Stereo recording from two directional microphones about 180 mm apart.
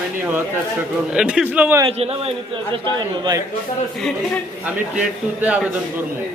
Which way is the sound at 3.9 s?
5° left (ahead or behind).